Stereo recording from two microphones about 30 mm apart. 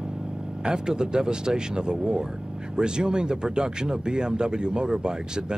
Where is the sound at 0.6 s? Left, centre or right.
Right.